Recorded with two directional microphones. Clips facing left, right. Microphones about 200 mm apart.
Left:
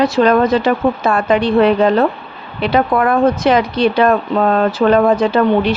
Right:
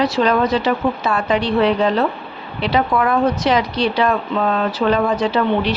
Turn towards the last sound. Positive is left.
turn(degrees=50)  # may be behind; listen again after turning